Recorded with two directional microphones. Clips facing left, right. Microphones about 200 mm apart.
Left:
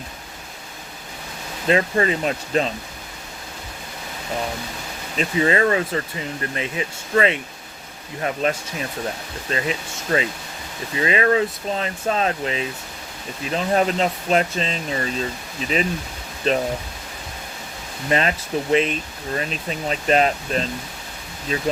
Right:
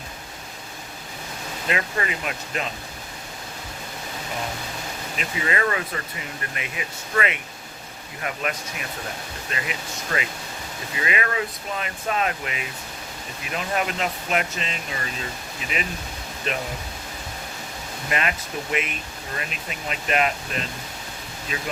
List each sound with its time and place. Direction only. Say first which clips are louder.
1.6 s speech: left 8 dB; 35° left (ahead or behind)
5.1 s speech: left 8 dB; 30° left (ahead or behind)
18.1 s speech: left 6 dB; 30° left (ahead or behind)